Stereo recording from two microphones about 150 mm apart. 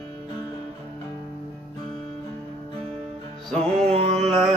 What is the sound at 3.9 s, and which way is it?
Carnatic music, 45° right (ahead or behind).